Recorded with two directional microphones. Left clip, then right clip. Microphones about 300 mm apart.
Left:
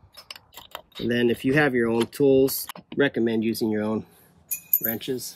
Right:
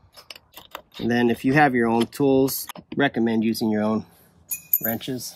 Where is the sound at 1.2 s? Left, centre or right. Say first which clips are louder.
Right 3 dB; centre.